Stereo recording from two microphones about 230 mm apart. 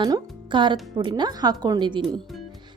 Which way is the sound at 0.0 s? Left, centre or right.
Centre.